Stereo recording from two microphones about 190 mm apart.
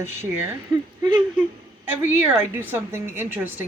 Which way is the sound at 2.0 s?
10° right (ahead or behind).